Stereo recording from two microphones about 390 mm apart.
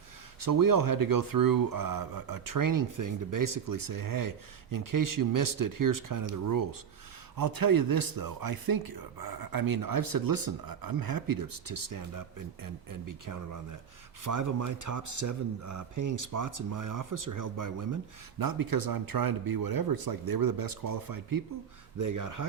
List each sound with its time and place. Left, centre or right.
0.3 s speech: right